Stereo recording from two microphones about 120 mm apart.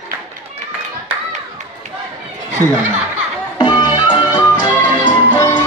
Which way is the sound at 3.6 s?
40° left (ahead or behind).